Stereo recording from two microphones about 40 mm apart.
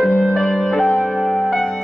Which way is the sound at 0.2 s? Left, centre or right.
Centre.